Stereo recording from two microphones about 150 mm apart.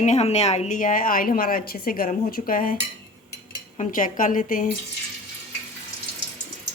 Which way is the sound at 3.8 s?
60° left (ahead or behind).